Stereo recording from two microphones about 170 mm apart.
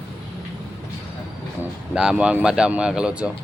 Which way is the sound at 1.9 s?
5° right (ahead or behind).